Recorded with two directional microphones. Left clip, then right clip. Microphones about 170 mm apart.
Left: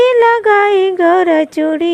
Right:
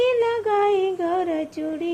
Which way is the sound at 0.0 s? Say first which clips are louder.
Left 11 dB; 40° left (ahead or behind).